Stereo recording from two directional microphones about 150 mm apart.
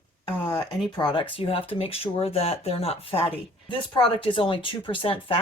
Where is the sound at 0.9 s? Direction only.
30° left (ahead or behind).